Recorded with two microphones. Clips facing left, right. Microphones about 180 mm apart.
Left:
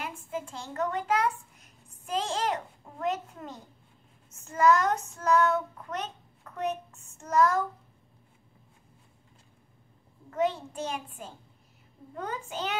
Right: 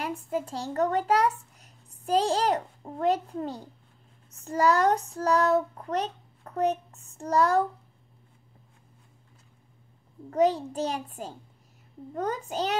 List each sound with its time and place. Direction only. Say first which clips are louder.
0.0 s a child's voice: right 6 dB; 35° right (ahead or behind)
4.3 s child singing: left 1 dB; 35° right (ahead or behind)
10.3 s child singing: right 5 dB; 35° right (ahead or behind)